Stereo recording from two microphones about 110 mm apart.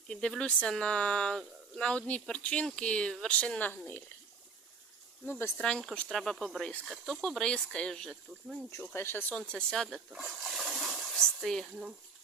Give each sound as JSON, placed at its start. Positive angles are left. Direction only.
{"t": 0.1, "sound": "speech", "side_deg": 5}
{"t": 5.2, "sound": "speech", "side_deg": 20}
{"t": 8.8, "sound": "speech", "side_deg": 20}
{"t": 9.5, "sound": "speech", "side_deg": 5}